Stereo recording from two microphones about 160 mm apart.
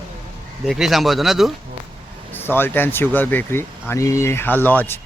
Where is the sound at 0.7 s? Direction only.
Centre (ahead or behind).